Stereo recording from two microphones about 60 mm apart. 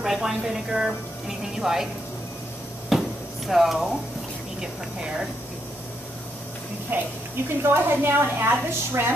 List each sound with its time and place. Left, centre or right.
0.0 s a woman's voice: centre
2.9 s a sound: centre
3.4 s speech: centre
6.9 s a woman's voice: right